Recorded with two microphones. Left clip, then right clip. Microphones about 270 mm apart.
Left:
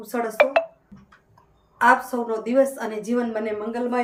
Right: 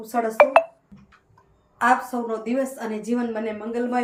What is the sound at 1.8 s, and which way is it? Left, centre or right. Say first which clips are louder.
A woman's voice: left 2 dB; centre.